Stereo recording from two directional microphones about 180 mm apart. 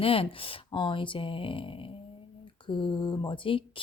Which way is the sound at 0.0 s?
30° left (ahead or behind).